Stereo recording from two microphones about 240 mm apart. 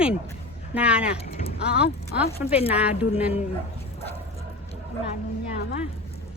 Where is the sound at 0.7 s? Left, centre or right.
Centre.